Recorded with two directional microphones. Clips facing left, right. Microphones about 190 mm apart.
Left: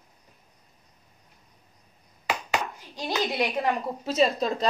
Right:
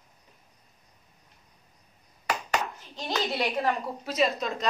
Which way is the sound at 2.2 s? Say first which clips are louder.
Left 1 dB; 10° left (ahead or behind).